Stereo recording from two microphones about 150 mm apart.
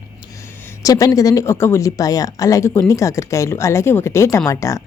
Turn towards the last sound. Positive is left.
turn(degrees=20)  # may be behind; listen again after turning